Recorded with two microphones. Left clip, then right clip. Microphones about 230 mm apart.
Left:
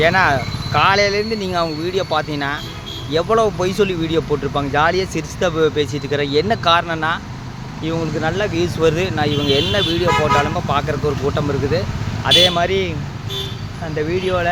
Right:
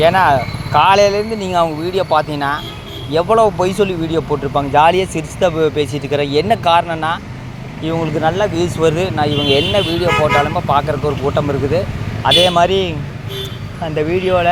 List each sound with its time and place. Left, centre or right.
0.0 s speech: centre
13.9 s speech: centre